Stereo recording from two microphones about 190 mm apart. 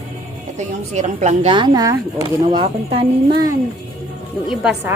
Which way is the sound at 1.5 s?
20° right (ahead or behind).